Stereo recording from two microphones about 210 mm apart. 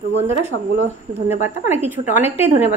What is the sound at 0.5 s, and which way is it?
Speech, 55° right (ahead or behind).